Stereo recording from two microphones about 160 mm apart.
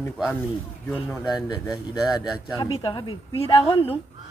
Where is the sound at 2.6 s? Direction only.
30° left (ahead or behind).